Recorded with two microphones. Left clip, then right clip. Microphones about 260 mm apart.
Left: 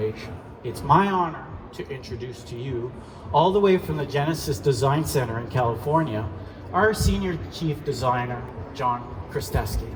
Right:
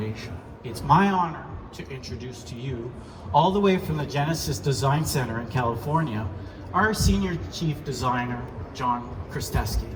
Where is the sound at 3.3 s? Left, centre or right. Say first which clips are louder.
Left 2 dB; left.